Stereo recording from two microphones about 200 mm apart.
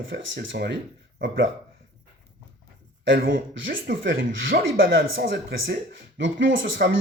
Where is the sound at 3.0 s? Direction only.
55° right (ahead or behind).